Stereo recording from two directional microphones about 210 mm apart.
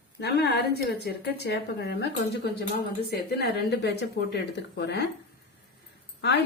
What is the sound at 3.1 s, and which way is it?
A woman's voice, 50° left (ahead or behind).